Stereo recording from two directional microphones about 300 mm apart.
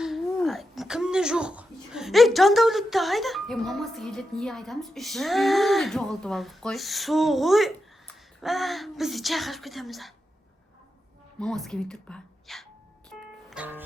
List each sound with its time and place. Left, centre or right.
0.0 s speech: centre
11.3 s speech: centre
13.1 s music: centre